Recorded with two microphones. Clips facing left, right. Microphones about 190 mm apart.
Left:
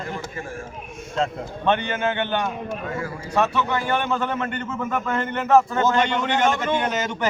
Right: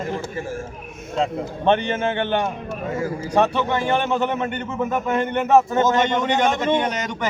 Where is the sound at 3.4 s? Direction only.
25° right (ahead or behind).